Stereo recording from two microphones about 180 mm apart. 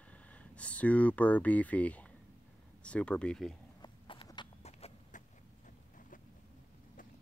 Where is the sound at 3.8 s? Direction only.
25° left (ahead or behind).